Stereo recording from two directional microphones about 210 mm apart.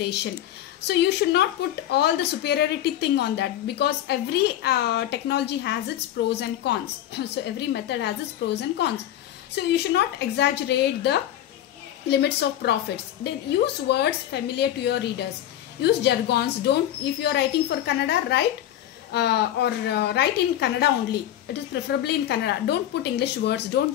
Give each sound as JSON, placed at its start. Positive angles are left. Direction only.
{"t": 0.0, "sound": "a woman's voice", "side_deg": 55}